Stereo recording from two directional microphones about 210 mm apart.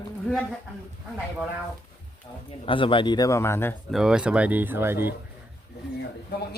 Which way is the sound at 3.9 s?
5° right (ahead or behind).